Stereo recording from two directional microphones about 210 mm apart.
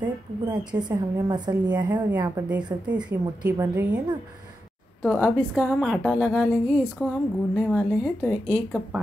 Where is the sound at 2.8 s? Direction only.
5° right (ahead or behind).